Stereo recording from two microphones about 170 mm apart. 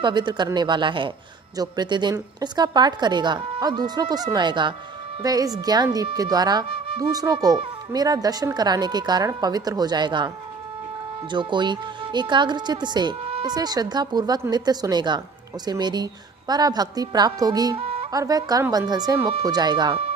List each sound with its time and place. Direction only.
0.0 s speech: 25° right (ahead or behind)
17.7 s music: 35° right (ahead or behind)
18.1 s speech: 20° right (ahead or behind)